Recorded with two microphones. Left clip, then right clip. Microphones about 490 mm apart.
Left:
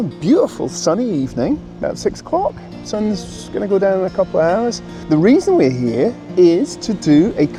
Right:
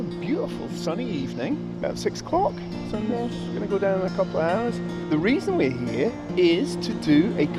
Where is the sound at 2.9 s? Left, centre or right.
Left.